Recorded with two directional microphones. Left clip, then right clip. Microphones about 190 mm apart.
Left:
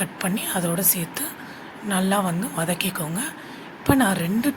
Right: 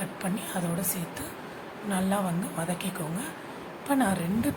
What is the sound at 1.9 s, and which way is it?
Speech, 20° left (ahead or behind).